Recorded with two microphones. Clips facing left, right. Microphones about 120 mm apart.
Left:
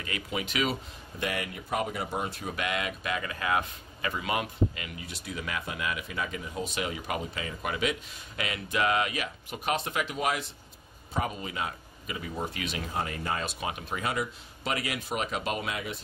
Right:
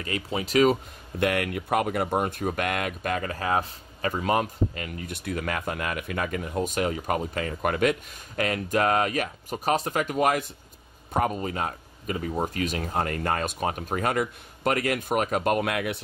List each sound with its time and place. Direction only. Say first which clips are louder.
0.0 s speech: right 4 dB; 35° right (ahead or behind)
1.2 s speech: right 8 dB; 60° right (ahead or behind)